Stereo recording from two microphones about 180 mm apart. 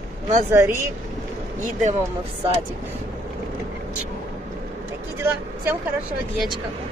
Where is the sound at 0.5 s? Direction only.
15° right (ahead or behind).